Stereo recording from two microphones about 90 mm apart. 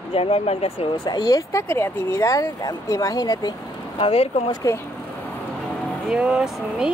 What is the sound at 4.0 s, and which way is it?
Speech, 90° left.